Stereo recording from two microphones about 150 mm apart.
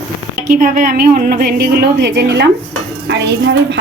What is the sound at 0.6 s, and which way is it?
A woman's voice, 70° right (ahead or behind).